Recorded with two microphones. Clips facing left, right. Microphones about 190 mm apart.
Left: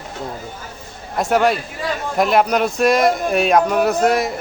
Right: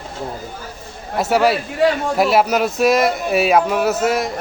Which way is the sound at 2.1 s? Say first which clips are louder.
Even; 5° right (ahead or behind).